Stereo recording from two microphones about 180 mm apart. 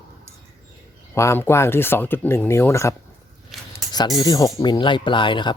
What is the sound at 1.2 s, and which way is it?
Speech, 15° left (ahead or behind).